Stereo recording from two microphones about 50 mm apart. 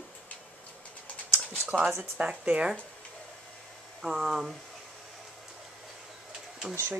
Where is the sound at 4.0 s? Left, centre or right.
Centre.